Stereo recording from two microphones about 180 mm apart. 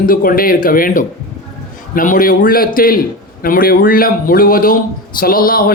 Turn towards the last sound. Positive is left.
turn(degrees=55)  # may be behind; listen again after turning